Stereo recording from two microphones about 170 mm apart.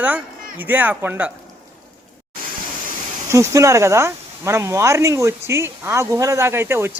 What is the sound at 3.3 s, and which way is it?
Speech, 15° right (ahead or behind).